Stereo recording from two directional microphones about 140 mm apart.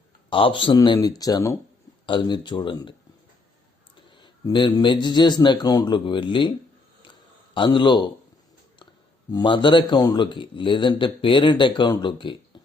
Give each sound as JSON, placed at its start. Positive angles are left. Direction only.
{"t": 0.3, "sound": "speech", "side_deg": 40}
{"t": 2.0, "sound": "speech", "side_deg": 35}
{"t": 4.2, "sound": "speech", "side_deg": 35}
{"t": 7.5, "sound": "speech", "side_deg": 35}
{"t": 9.3, "sound": "speech", "side_deg": 35}